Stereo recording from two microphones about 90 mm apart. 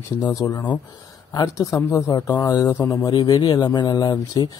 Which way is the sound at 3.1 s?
50° left (ahead or behind).